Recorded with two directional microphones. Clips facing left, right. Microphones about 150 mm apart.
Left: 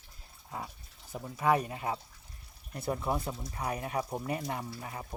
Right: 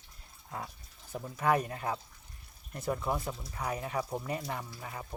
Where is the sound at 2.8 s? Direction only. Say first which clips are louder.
Even; 35° left (ahead or behind).